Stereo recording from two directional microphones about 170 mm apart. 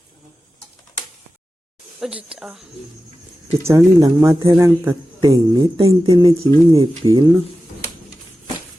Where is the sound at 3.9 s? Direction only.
20° right (ahead or behind).